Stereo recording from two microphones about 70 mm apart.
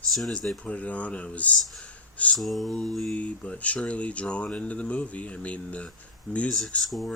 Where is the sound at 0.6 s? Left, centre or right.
Centre.